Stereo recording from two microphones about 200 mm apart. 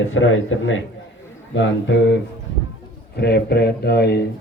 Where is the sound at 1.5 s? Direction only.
65° left (ahead or behind).